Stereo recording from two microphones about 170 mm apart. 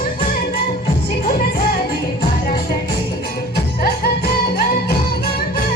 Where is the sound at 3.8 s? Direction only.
65° left (ahead or behind).